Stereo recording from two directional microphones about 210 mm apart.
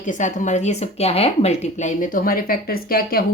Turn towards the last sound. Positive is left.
turn(degrees=45)  # may be behind; listen again after turning